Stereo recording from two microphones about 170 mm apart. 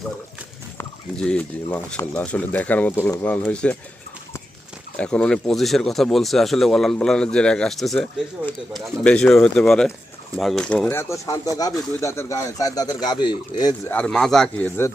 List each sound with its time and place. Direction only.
1.1 s speech: 5° left (ahead or behind)
4.9 s speech: 5° left (ahead or behind)
10.8 s speech: 15° left (ahead or behind)
13.8 s speech: 5° left (ahead or behind)